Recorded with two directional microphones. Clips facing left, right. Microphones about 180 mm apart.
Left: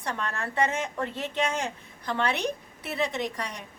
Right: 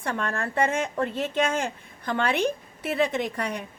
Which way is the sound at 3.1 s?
55° right (ahead or behind).